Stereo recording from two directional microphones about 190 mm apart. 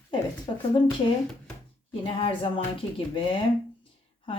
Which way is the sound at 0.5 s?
25° left (ahead or behind).